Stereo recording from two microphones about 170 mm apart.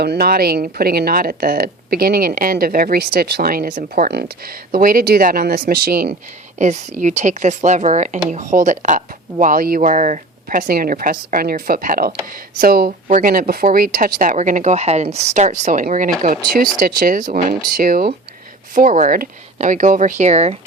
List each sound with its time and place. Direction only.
0.0 s a woman's voice: 70° right (ahead or behind)
6.6 s a woman's voice: 45° right (ahead or behind)